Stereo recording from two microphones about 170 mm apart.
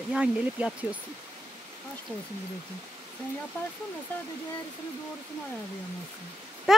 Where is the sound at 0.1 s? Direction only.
5° right (ahead or behind).